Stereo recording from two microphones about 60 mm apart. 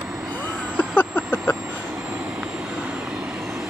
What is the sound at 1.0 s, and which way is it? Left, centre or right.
Vehicle, left.